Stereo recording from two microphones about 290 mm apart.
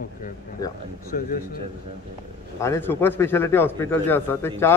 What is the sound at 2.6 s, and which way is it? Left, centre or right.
A man's voice, centre.